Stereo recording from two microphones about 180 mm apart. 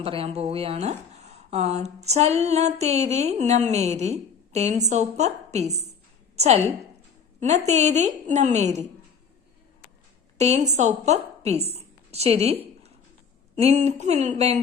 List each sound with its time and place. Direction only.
0.0 s a woman's voice: 30° right (ahead or behind)
10.3 s a woman's voice: 40° right (ahead or behind)